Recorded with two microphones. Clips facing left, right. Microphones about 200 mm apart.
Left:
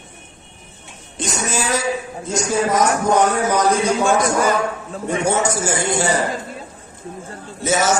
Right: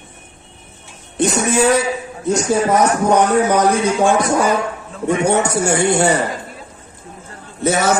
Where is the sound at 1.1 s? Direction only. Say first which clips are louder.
Right 8 dB; 60° right (ahead or behind).